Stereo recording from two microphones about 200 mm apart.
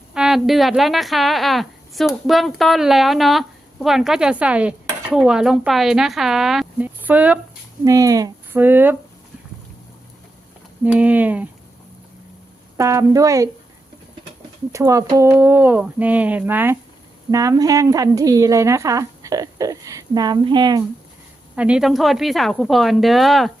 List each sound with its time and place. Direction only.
0.1 s a woman's voice: 5° right (ahead or behind)
10.9 s a woman's voice: 10° right (ahead or behind)
12.7 s a woman's voice: 15° right (ahead or behind)
14.7 s a woman's voice: 15° right (ahead or behind)
21.5 s a woman's voice: 5° right (ahead or behind)